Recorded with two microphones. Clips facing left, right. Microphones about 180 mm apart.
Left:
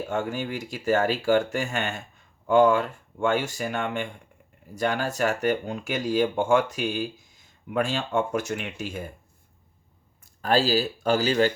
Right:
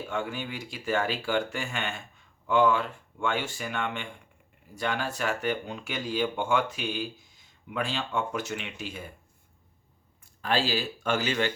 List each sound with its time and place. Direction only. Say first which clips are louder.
0.0 s speech: left 5 dB; 45° left (ahead or behind)
10.4 s speech: left 6 dB; 40° left (ahead or behind)